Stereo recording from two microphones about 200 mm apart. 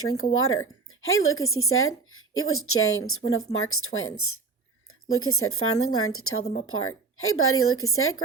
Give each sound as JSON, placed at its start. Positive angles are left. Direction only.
{"t": 0.3, "sound": "speech", "side_deg": 90}